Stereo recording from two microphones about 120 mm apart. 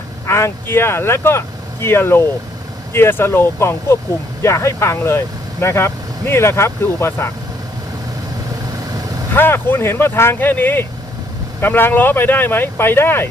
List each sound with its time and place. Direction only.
0.3 s speech: 25° left (ahead or behind)
9.3 s speech: 20° left (ahead or behind)